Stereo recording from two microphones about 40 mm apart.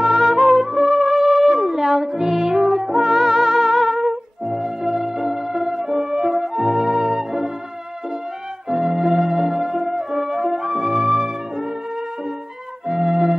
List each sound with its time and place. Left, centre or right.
0.0 s music: centre
8.6 s music: centre
12.8 s music: centre